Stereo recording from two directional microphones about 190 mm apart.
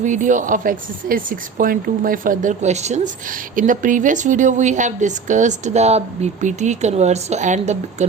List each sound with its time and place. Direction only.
0.0 s speech: 40° right (ahead or behind)